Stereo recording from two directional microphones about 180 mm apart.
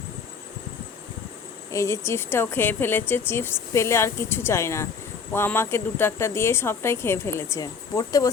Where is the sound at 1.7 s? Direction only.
15° left (ahead or behind).